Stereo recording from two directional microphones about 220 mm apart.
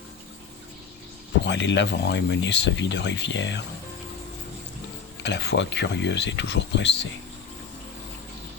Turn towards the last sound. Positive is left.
turn(degrees=55)  # may be behind; listen again after turning